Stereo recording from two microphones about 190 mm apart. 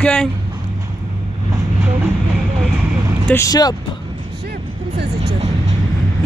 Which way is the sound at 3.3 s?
15° left (ahead or behind).